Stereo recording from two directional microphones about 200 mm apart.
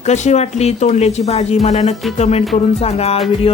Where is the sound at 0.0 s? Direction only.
35° left (ahead or behind).